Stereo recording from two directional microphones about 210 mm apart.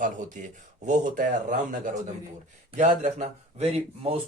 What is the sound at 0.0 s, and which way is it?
Speech, 35° right (ahead or behind).